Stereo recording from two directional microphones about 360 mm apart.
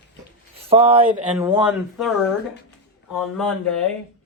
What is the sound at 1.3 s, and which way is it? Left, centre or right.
Speech, centre.